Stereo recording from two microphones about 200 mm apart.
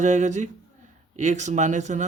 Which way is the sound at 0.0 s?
35° right (ahead or behind).